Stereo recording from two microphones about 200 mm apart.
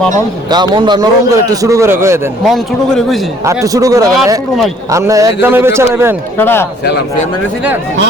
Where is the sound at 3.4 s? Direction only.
15° right (ahead or behind).